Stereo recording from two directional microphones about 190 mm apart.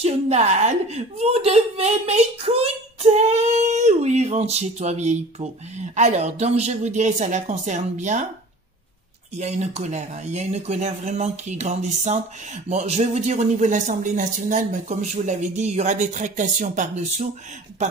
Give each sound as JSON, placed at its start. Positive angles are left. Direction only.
{"t": 0.0, "sound": "speech", "side_deg": -35}
{"t": 9.4, "sound": "speech", "side_deg": -35}